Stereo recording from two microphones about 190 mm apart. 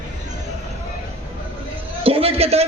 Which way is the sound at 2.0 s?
30° right (ahead or behind).